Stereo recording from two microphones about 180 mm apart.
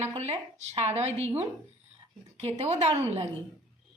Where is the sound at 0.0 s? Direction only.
35° right (ahead or behind).